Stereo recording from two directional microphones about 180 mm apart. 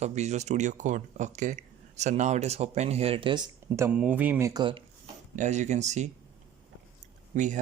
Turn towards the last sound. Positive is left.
turn(degrees=-45)  # may be behind; listen again after turning